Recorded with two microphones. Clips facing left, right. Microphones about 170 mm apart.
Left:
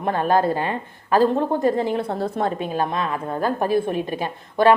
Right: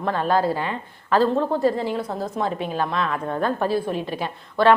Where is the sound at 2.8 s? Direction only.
15° left (ahead or behind).